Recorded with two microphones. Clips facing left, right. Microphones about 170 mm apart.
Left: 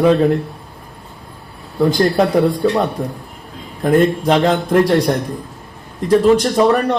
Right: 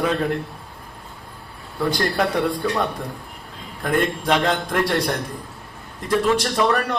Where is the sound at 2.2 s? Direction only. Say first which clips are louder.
Left 6 dB; 25° left (ahead or behind).